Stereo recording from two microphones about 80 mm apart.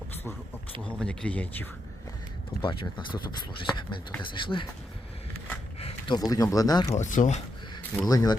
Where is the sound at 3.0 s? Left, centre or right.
Left.